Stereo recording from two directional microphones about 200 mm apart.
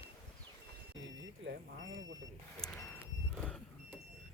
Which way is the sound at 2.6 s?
Centre (ahead or behind).